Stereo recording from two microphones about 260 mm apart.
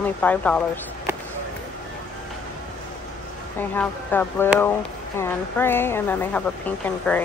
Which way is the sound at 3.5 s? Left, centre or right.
Centre.